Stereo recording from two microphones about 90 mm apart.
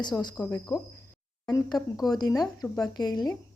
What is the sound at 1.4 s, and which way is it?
Speech, 50° left (ahead or behind).